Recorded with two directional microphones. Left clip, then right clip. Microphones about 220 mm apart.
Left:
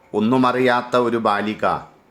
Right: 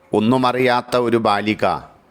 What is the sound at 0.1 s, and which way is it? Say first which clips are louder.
A man's voice: right 1 dB; 35° right (ahead or behind).